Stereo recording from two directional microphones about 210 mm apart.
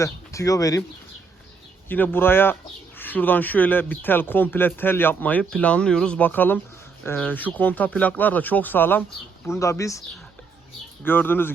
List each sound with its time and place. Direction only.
0.0 s speech: 15° left (ahead or behind)
1.9 s speech: 10° left (ahead or behind)
11.0 s speech: 10° left (ahead or behind)